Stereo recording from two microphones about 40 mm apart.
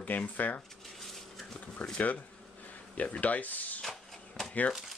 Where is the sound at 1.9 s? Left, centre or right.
Left.